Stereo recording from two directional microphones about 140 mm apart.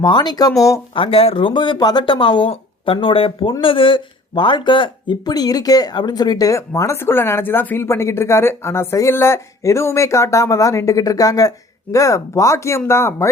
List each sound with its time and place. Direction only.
0.0 s speech: 30° left (ahead or behind)
0.9 s speech: 40° left (ahead or behind); by 13.3 s 20° left (ahead or behind)